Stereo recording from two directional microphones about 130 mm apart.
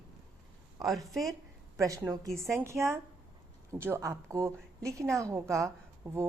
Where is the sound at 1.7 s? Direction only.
25° right (ahead or behind).